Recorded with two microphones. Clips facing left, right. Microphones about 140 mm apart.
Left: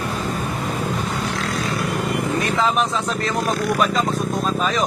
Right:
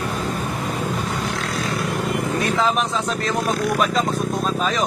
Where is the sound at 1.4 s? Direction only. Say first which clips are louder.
Left 1 dB; centre (ahead or behind).